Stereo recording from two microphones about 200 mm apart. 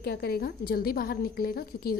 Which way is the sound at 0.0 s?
50° left (ahead or behind).